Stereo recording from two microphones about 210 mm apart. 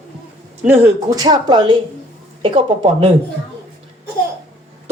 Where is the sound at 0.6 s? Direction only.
10° right (ahead or behind); by 3.1 s 30° right (ahead or behind).